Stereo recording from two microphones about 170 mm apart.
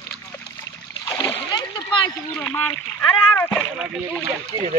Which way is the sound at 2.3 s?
10° left (ahead or behind).